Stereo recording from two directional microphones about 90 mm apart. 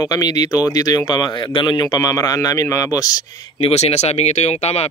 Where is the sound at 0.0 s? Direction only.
45° left (ahead or behind).